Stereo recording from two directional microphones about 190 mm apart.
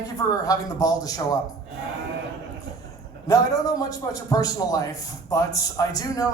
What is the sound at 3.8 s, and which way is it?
A man's voice, 20° left (ahead or behind).